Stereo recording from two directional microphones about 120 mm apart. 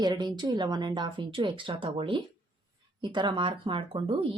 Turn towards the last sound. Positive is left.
turn(degrees=-50)  # may be behind; listen again after turning